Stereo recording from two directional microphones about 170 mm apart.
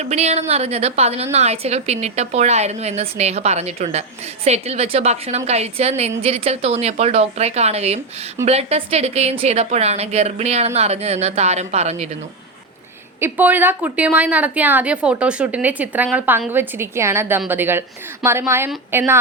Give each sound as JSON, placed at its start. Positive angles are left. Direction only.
{"t": 0.0, "sound": "a woman's voice", "side_deg": -40}
{"t": 13.1, "sound": "a woman's voice", "side_deg": -10}